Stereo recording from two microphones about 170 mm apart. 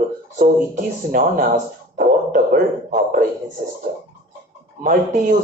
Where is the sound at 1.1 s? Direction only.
50° right (ahead or behind).